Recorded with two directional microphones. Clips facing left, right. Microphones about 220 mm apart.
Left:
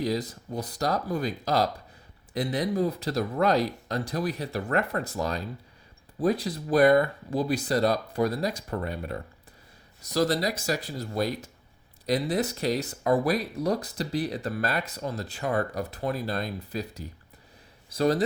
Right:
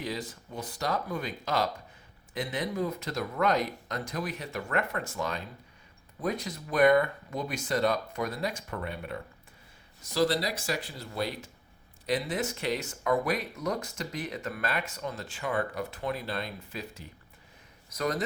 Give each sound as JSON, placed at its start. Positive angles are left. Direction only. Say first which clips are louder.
{"t": 0.0, "sound": "speech", "louder": "left 7 dB", "side_deg": 40}